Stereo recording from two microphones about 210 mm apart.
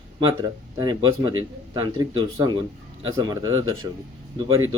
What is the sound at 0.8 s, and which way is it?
Speech, 20° right (ahead or behind).